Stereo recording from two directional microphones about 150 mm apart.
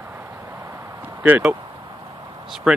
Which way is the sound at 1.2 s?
10° right (ahead or behind).